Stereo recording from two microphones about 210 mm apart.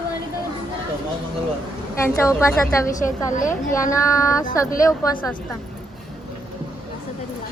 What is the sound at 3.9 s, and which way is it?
A woman's voice, 15° left (ahead or behind).